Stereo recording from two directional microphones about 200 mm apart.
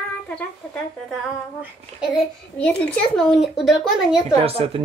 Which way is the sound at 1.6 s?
5° right (ahead or behind).